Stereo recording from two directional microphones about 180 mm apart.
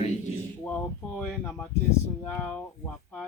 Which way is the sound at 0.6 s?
5° left (ahead or behind).